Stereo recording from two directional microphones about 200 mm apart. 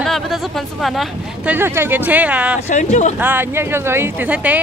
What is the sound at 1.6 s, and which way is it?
Speech, 10° right (ahead or behind).